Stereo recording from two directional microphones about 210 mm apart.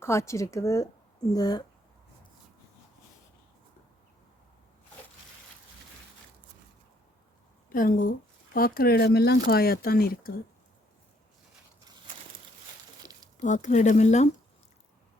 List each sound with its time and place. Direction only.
0.0 s a woman's voice: 15° left (ahead or behind)
7.7 s a woman's voice: 40° left (ahead or behind)
13.0 s a sound: 20° right (ahead or behind)
13.4 s speech: 35° left (ahead or behind)